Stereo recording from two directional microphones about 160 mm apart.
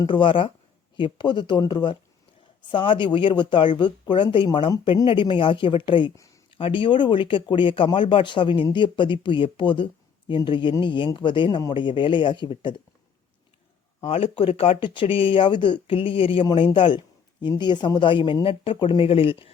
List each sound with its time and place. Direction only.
0.0 s speech: 30° left (ahead or behind)
6.1 s a sound: 20° left (ahead or behind)
6.5 s speech: 35° left (ahead or behind)
14.1 s speech: 35° left (ahead or behind)